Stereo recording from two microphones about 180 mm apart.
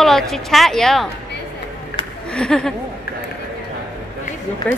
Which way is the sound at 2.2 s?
5° left (ahead or behind).